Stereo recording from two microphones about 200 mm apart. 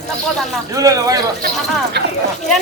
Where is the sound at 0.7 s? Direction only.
15° right (ahead or behind).